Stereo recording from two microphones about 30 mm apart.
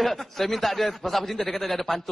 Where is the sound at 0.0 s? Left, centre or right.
Centre.